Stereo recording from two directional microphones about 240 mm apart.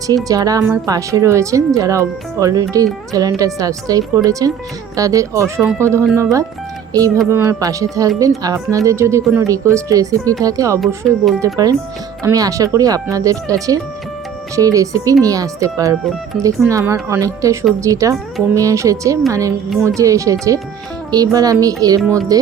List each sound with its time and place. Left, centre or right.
0.3 s speech: centre
10.8 s speech: centre
11.3 s speech: centre